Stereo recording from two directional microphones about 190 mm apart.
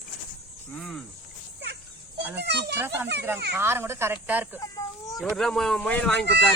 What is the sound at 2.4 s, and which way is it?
Speech, 60° right (ahead or behind).